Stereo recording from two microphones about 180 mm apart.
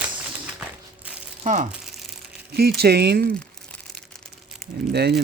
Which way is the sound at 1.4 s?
45° right (ahead or behind).